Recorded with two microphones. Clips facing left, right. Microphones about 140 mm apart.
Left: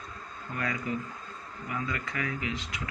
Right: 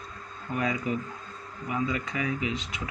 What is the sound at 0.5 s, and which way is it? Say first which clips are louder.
Speech: right 4 dB; 20° right (ahead or behind).